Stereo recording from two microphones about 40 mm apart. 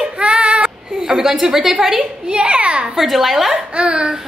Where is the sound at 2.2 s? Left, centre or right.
Right.